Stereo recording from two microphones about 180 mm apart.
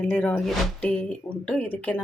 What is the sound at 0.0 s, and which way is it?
Speech, 10° left (ahead or behind).